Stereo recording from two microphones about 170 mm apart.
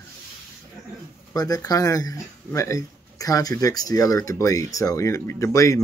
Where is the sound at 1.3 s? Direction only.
20° left (ahead or behind).